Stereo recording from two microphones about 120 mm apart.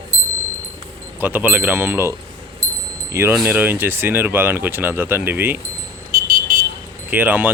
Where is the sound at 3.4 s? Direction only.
15° right (ahead or behind).